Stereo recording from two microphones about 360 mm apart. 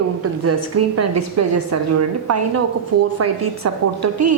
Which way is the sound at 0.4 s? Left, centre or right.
Right.